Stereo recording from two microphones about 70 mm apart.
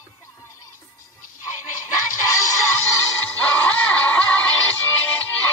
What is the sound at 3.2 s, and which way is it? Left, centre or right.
Music, left.